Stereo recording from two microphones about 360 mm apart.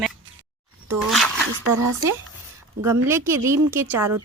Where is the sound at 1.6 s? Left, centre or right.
Right.